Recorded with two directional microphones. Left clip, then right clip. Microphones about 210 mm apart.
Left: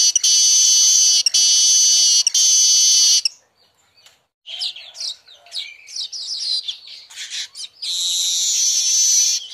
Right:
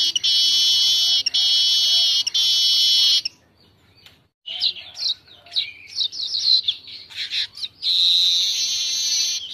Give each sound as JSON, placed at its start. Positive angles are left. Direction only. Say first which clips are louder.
{"t": 0.1, "sound": "fire alarm", "louder": "left 2 dB", "side_deg": 30}
{"t": 4.6, "sound": "bird", "louder": "right 3 dB", "side_deg": 20}